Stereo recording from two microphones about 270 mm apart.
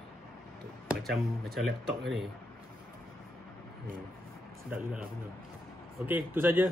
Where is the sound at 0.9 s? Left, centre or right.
Centre.